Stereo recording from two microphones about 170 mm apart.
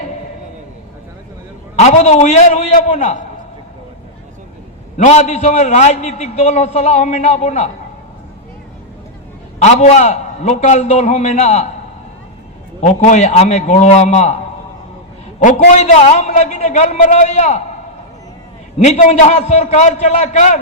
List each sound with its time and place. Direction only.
1.8 s a man's voice: 40° left (ahead or behind)
4.9 s a man's voice: 40° left (ahead or behind)
9.6 s a man's voice: 40° left (ahead or behind)
12.8 s a man's voice: 45° left (ahead or behind)
15.4 s a man's voice: 45° left (ahead or behind)
18.8 s a man's voice: 45° left (ahead or behind)